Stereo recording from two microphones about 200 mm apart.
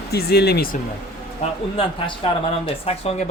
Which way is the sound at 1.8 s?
25° left (ahead or behind).